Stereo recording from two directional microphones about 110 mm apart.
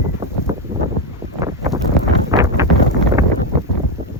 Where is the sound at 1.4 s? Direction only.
30° right (ahead or behind).